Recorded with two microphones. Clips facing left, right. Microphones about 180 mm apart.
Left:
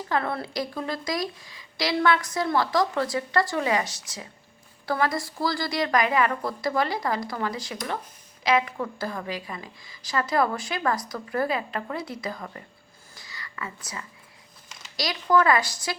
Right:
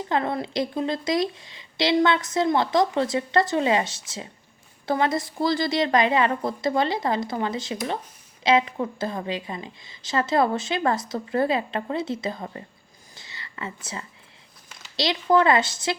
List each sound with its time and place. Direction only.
0.1 s a woman's voice: 20° right (ahead or behind)
13.1 s whispering: 25° right (ahead or behind)
14.9 s a woman's voice: 25° right (ahead or behind)